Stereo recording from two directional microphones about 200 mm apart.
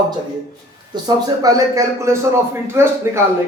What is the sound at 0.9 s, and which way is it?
Speech, 20° right (ahead or behind).